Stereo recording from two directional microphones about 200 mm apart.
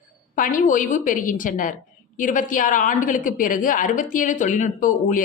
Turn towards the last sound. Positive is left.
turn(degrees=40)  # may be behind; listen again after turning